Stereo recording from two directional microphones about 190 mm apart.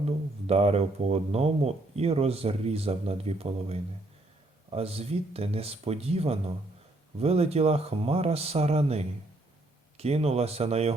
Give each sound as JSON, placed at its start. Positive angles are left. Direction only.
{"t": 0.0, "sound": "speech", "side_deg": -35}